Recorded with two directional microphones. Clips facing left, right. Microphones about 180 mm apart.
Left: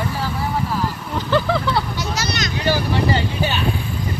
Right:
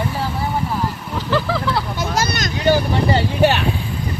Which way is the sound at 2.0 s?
50° right (ahead or behind).